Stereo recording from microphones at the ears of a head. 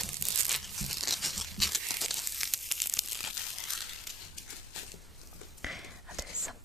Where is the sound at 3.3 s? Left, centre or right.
Left.